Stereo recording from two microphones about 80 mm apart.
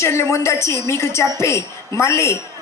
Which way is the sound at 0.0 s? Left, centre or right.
Left.